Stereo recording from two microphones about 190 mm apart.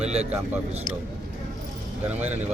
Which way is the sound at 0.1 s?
35° right (ahead or behind).